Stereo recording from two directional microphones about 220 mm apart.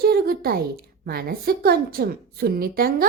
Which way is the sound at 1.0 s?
45° right (ahead or behind).